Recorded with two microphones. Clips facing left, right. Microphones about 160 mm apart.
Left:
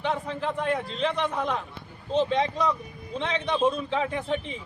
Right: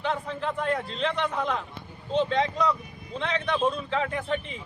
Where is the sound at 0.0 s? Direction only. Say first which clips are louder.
Left 1 dB; 10° left (ahead or behind).